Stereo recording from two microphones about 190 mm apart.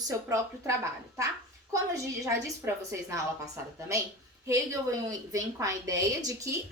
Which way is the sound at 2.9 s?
15° right (ahead or behind).